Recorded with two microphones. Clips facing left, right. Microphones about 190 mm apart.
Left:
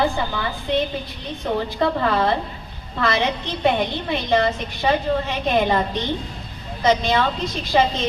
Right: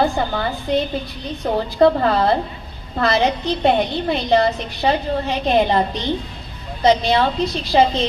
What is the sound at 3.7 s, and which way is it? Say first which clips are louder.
A woman's voice: right 2 dB; 40° right (ahead or behind).